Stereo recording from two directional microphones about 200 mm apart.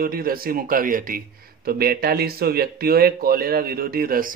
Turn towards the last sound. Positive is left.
turn(degrees=-45)  # may be behind; listen again after turning